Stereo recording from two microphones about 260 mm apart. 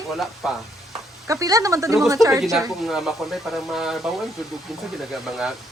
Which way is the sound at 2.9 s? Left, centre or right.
Centre.